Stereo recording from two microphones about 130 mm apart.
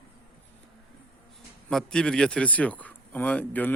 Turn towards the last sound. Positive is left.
turn(degrees=15)  # may be behind; listen again after turning